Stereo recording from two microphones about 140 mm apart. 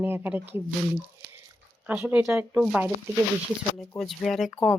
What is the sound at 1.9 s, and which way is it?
Speech, 10° right (ahead or behind).